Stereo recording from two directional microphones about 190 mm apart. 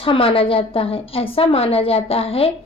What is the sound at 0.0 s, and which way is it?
A woman's voice, 30° left (ahead or behind).